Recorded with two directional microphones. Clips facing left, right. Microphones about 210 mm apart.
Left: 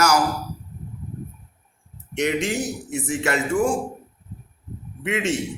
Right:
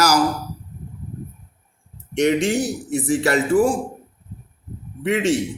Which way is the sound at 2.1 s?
35° right (ahead or behind).